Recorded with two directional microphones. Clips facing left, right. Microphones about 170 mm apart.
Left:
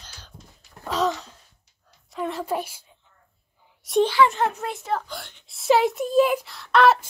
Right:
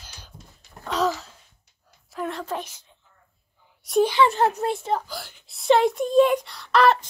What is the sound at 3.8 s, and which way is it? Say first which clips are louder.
Speech: even; centre (ahead or behind).